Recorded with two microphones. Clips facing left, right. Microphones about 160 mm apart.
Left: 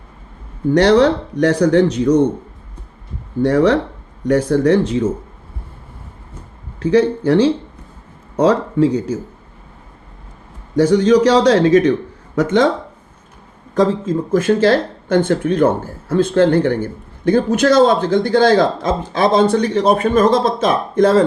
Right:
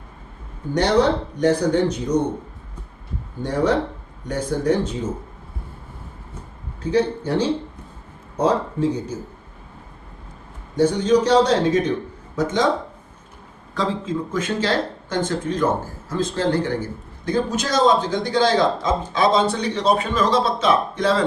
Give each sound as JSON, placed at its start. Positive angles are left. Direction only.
{"t": 0.7, "sound": "speech", "side_deg": 75}
{"t": 3.4, "sound": "speech", "side_deg": 75}
{"t": 6.7, "sound": "a man's voice", "side_deg": 85}
{"t": 10.8, "sound": "a man's voice", "side_deg": 85}
{"t": 12.4, "sound": "speech", "side_deg": 65}
{"t": 13.7, "sound": "speech", "side_deg": 45}